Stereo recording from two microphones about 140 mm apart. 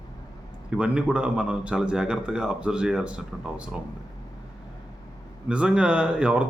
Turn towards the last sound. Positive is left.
turn(degrees=-10)  # may be behind; listen again after turning